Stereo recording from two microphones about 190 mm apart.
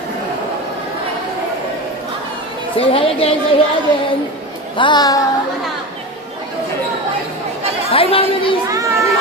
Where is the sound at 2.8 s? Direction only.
30° left (ahead or behind).